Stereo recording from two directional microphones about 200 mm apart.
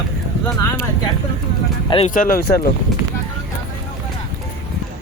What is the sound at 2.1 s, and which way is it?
Speech, 45° left (ahead or behind).